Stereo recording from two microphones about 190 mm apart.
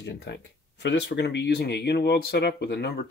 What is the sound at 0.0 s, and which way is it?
Speech, 65° left (ahead or behind).